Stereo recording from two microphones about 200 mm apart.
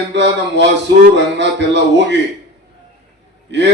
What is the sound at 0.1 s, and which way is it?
A man's voice, 60° right (ahead or behind).